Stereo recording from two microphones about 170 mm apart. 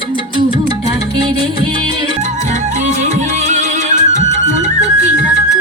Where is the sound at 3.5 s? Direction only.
45° right (ahead or behind).